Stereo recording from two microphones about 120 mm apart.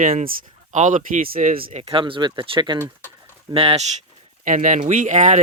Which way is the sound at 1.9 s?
45° right (ahead or behind).